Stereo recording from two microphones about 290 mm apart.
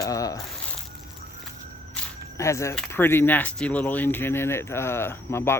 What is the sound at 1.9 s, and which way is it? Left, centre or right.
Speech, centre.